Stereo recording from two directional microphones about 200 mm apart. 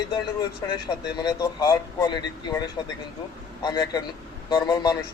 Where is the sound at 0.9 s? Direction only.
20° left (ahead or behind).